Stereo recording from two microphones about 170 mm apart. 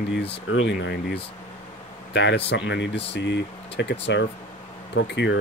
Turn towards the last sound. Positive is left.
turn(degrees=90)